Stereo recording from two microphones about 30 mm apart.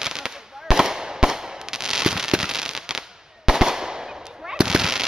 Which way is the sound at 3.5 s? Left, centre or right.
Centre.